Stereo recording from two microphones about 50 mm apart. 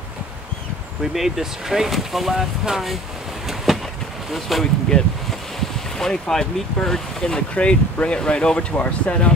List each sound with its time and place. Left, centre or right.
1.1 s speech: centre
3.4 s vehicle: centre
4.3 s speech: centre
5.9 s speech: centre
7.5 s speech: left